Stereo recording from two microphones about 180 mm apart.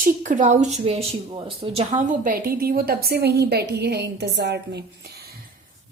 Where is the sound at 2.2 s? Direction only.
55° right (ahead or behind).